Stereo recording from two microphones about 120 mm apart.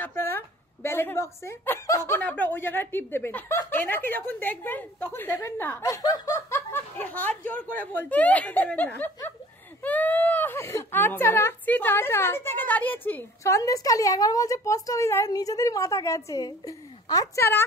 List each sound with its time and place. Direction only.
0.0 s a woman's voice: 20° left (ahead or behind)
5.8 s speech: 30° left (ahead or behind)
6.3 s a woman's voice: 20° left (ahead or behind)